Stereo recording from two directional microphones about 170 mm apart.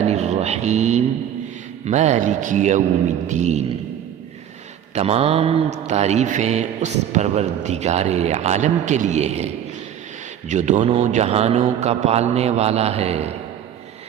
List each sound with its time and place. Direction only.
0.0 s a sound: 40° right (ahead or behind)
1.8 s a man's voice: 40° right (ahead or behind)
4.9 s mantra: 35° right (ahead or behind)
10.5 s mantra: 45° right (ahead or behind)